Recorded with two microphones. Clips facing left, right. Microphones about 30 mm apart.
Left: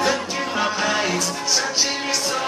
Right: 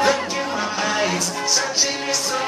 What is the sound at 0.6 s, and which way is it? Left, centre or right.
Music, centre.